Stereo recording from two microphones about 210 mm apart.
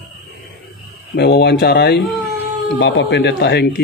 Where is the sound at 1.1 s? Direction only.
50° left (ahead or behind).